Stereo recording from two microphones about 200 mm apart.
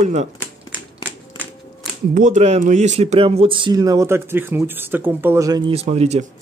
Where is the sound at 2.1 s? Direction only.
40° right (ahead or behind).